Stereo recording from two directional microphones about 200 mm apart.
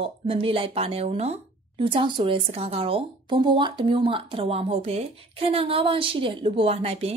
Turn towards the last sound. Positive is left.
turn(degrees=-30)  # may be behind; listen again after turning